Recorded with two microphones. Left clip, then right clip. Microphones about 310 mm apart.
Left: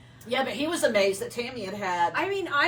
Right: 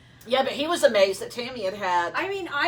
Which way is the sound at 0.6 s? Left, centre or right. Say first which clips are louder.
Right 4 dB; centre.